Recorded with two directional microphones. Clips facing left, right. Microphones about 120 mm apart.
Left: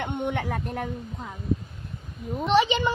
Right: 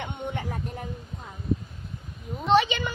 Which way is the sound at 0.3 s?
75° left (ahead or behind).